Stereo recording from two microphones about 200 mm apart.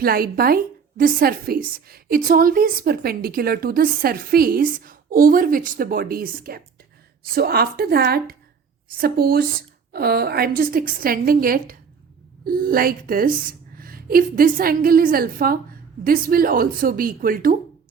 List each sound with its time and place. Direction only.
0.0 s a woman's voice: 50° right (ahead or behind)